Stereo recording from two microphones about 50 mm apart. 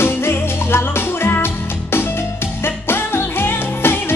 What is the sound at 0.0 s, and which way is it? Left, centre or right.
Music, left.